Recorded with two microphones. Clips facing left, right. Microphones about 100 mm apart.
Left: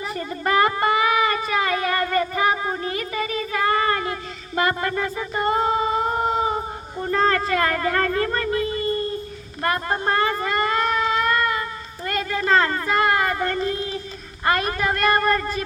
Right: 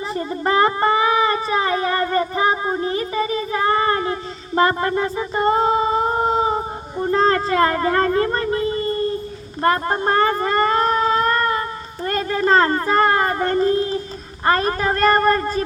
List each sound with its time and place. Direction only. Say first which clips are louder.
0.1 s a child's voice: right 3 dB; 25° right (ahead or behind)